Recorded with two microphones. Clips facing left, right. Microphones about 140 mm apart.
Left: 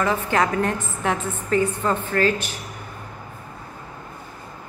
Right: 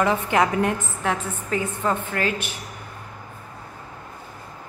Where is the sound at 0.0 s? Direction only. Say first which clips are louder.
Right 1 dB; 15° right (ahead or behind).